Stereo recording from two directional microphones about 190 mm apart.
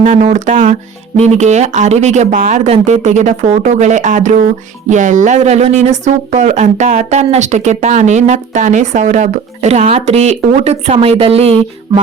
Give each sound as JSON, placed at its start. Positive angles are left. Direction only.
{"t": 0.0, "sound": "speech", "side_deg": -40}